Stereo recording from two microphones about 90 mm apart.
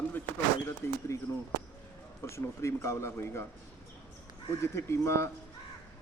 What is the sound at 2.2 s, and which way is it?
A man's voice, 30° left (ahead or behind).